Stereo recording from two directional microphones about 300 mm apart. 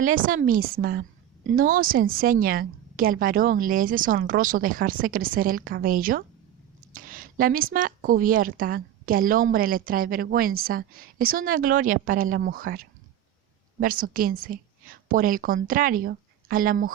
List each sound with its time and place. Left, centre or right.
0.0 s a woman's voice: right